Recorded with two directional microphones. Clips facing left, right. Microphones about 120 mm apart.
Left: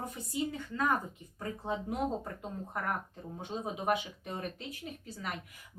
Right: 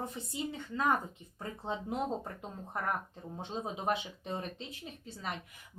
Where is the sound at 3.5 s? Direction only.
25° right (ahead or behind).